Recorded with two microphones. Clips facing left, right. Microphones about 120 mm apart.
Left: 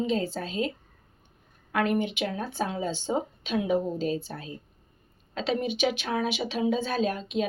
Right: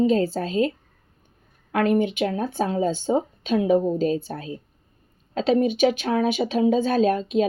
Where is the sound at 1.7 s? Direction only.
45° right (ahead or behind).